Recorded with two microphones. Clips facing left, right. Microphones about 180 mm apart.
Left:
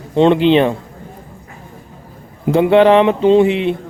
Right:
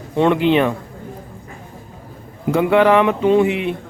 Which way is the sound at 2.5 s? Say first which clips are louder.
Left 4 dB; 25° left (ahead or behind).